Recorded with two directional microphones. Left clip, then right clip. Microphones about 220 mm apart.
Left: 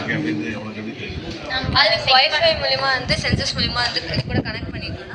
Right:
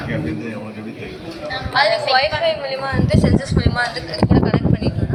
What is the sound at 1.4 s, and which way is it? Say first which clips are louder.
Speech: even; 25° right (ahead or behind).